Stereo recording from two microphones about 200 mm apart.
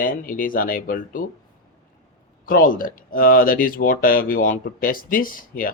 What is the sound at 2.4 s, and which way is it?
Speech, 45° left (ahead or behind).